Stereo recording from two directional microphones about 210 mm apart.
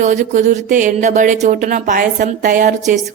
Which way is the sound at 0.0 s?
35° right (ahead or behind).